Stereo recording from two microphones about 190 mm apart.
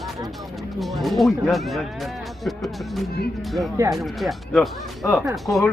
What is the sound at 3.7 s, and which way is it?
Speech, 15° right (ahead or behind).